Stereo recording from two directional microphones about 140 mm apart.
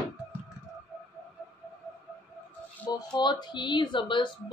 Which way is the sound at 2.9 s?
30° left (ahead or behind).